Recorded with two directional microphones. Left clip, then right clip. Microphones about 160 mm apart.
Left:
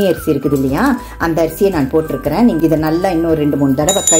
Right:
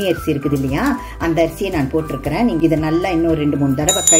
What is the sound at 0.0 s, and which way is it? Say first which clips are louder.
Speech: left 4 dB; 35° left (ahead or behind).